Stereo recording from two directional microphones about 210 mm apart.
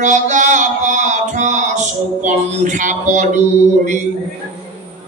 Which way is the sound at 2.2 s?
35° right (ahead or behind).